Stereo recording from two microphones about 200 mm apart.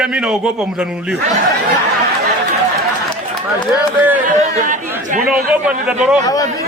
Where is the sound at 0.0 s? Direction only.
Centre (ahead or behind).